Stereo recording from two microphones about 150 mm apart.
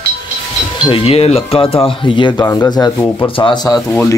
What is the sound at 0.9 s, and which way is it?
Speech, 40° left (ahead or behind).